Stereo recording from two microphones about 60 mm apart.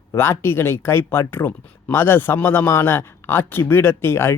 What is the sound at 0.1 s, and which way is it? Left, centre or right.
Speech, left.